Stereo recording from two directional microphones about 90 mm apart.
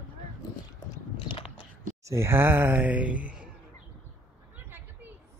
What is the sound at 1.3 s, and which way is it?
Biting, 85° left.